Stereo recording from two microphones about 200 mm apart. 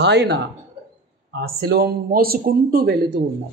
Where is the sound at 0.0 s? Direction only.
55° right (ahead or behind).